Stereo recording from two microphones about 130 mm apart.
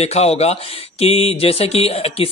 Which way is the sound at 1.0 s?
50° left (ahead or behind).